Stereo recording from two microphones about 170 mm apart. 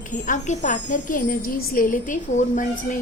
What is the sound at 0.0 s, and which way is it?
Speech, 50° left (ahead or behind).